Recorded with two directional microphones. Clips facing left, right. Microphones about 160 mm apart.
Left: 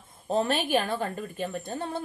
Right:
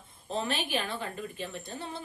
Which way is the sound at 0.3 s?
45° left (ahead or behind).